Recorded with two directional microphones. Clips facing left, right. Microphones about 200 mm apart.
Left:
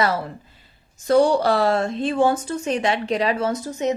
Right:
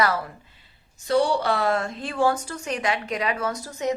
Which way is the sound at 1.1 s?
45° left (ahead or behind).